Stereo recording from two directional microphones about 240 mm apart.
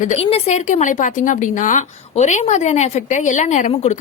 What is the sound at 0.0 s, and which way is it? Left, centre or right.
A woman's voice, left.